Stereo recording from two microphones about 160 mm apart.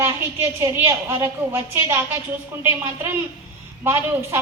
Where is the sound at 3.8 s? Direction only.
15° right (ahead or behind).